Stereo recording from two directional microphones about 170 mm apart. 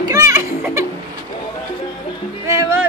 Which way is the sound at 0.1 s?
15° right (ahead or behind).